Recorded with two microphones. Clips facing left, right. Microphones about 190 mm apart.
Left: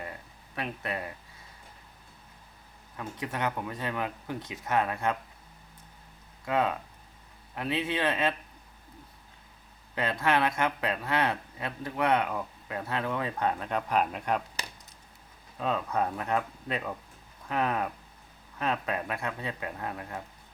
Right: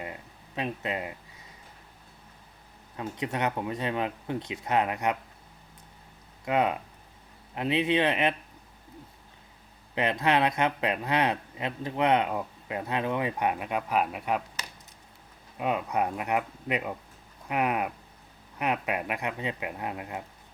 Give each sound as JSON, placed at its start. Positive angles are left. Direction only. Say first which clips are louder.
{"t": 0.0, "sound": "a sound", "louder": "right 2 dB", "side_deg": -15}
{"t": 2.9, "sound": "speech", "louder": "right 3 dB", "side_deg": -20}
{"t": 6.4, "sound": "speech", "louder": "right 2 dB", "side_deg": -20}
{"t": 9.9, "sound": "speech", "louder": "right 2 dB", "side_deg": -20}
{"t": 15.5, "sound": "speech", "louder": "right 1 dB", "side_deg": -15}